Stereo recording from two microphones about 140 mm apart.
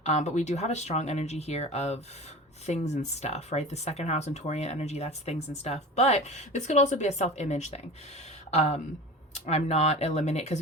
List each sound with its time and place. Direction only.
0.0 s speech: 55° left (ahead or behind)